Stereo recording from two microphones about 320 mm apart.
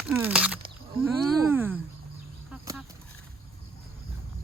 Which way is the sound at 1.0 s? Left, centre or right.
Centre.